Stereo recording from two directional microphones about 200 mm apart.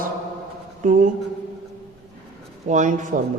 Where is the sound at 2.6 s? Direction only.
40° right (ahead or behind).